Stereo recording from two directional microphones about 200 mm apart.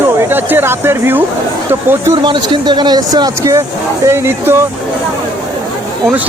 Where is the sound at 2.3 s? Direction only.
25° right (ahead or behind).